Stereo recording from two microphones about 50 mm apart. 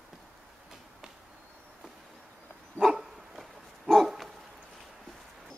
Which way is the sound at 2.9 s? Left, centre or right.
Centre.